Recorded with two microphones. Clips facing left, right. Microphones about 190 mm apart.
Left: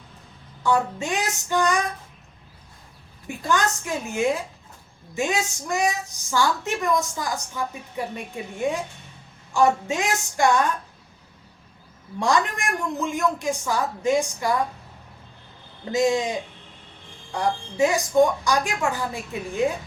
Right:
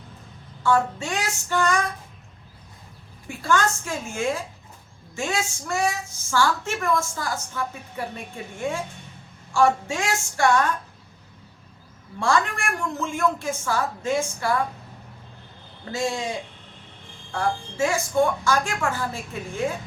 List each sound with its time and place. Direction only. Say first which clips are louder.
0.6 s a woman's voice: right 1 dB; 15° left (ahead or behind)
3.2 s a woman's voice: right 1 dB; 15° left (ahead or behind)
12.2 s a woman's voice: left 1 dB; 20° left (ahead or behind)
15.8 s a woman's voice: left 6 dB; 20° left (ahead or behind)